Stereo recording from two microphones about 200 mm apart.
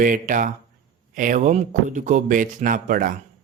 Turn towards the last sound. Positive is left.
turn(degrees=-45)  # may be behind; listen again after turning